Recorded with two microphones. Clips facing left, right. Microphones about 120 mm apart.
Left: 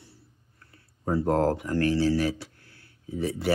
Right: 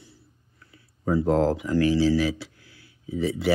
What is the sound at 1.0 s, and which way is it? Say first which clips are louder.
Speech: right 2 dB; 45° left (ahead or behind).